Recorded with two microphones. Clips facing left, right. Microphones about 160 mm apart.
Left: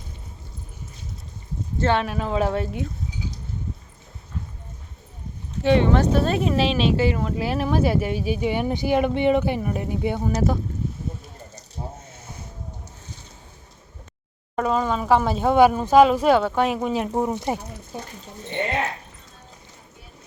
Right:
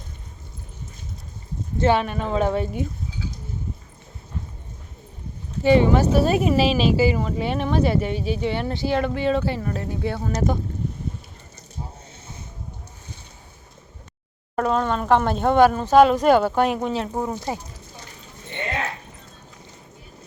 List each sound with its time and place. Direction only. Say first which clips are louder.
1.8 s speech: right 2 dB; 10° right (ahead or behind)
2.0 s speech: right 1 dB; centre (ahead or behind)
5.6 s speech: right 2 dB; 5° right (ahead or behind)
14.5 s speech: right 1 dB; centre (ahead or behind)
17.2 s speech: left 2 dB; 20° left (ahead or behind)